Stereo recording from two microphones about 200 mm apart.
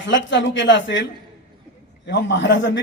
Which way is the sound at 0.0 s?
65° left (ahead or behind).